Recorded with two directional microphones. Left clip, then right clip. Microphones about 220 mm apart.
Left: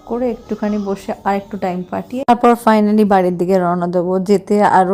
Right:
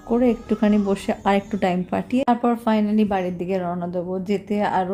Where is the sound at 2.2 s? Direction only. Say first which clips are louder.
Left 12 dB; 35° left (ahead or behind).